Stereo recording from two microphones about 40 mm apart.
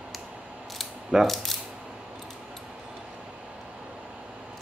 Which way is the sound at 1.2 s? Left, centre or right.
Centre.